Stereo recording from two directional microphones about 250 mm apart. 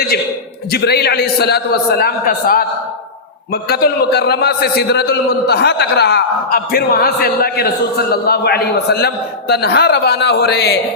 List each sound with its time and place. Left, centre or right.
0.7 s a man's voice: left